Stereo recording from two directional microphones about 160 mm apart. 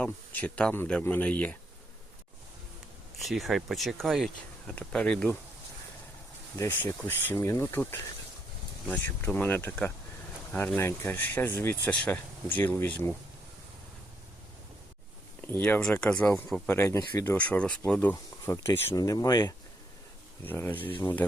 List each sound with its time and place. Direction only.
0.0 s speech: 10° left (ahead or behind)
3.2 s speech: centre (ahead or behind)
6.6 s speech: 15° left (ahead or behind)
15.4 s speech: 10° left (ahead or behind)
20.4 s speech: 10° left (ahead or behind)